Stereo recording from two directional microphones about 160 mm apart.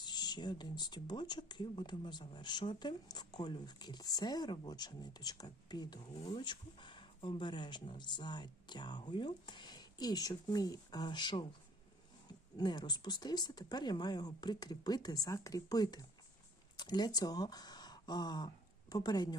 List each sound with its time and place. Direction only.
0.0 s speech: 25° left (ahead or behind)
12.5 s speech: 25° left (ahead or behind)